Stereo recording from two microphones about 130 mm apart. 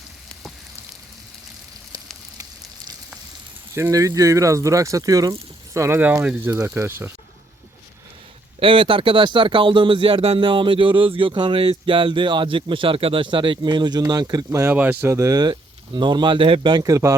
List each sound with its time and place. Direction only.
3.8 s speech: 25° right (ahead or behind)
8.5 s speech: 45° right (ahead or behind)
14.6 s speech: 15° right (ahead or behind); by 16.8 s 40° right (ahead or behind)
16.8 s speech: 25° right (ahead or behind)